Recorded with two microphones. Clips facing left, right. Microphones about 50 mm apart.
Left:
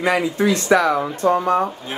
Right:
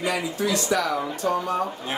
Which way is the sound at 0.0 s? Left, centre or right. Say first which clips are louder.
Left 7 dB; left.